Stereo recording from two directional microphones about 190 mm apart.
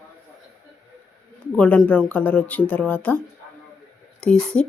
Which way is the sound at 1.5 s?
5° left (ahead or behind).